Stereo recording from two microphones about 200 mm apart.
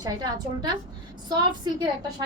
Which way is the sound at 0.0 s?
20° right (ahead or behind).